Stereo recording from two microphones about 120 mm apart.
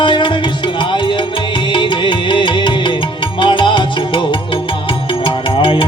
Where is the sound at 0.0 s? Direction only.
40° left (ahead or behind).